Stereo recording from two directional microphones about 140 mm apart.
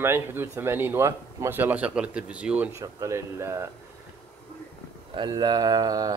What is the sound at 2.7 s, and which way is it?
Speech, 25° right (ahead or behind).